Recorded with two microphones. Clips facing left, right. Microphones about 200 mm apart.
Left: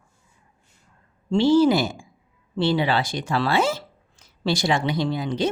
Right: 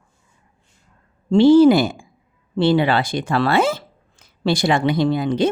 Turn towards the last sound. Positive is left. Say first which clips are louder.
# right 6 dB
turn(degrees=-55)  # may be behind; listen again after turning